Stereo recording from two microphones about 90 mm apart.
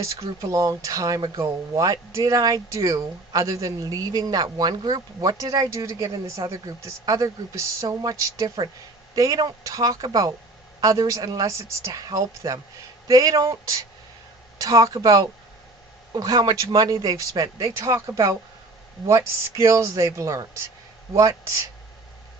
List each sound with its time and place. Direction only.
0.0 s speech: 35° right (ahead or behind)